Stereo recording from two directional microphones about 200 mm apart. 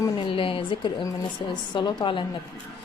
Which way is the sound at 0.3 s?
25° left (ahead or behind).